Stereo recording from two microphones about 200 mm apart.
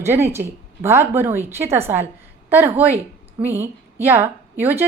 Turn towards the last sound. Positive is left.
turn(degrees=-10)  # may be behind; listen again after turning